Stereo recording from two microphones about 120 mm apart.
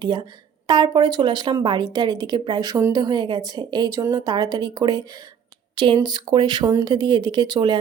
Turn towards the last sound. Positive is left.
turn(degrees=-40)  # may be behind; listen again after turning